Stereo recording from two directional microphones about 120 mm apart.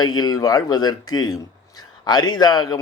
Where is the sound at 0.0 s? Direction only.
35° left (ahead or behind).